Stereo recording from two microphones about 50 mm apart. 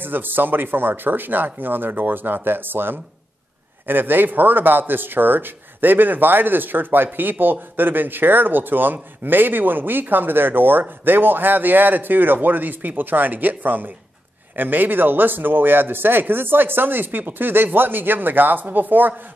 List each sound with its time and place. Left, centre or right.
0.0 s speech: right